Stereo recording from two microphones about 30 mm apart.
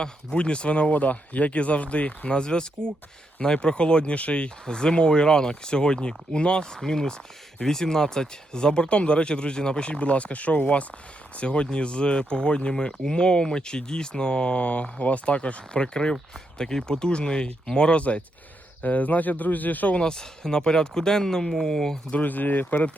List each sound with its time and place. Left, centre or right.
0.0 s speech: left
2.3 s speech: left
4.6 s speech: left
6.8 s speech: left
10.6 s speech: left
15.4 s speech: left
17.9 s speech: left
18.8 s speech: left
20.0 s speech: left
22.2 s speech: left